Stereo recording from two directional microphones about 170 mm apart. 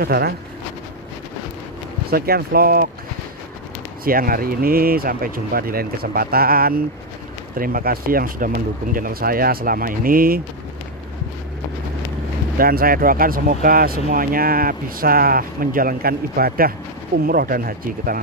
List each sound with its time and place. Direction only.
0.0 s speech: 65° right (ahead or behind)
2.0 s speech: 65° right (ahead or behind)
4.0 s speech: 60° right (ahead or behind)
12.5 s speech: 60° right (ahead or behind)